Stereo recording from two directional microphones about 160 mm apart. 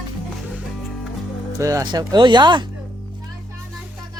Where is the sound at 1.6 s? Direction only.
20° right (ahead or behind).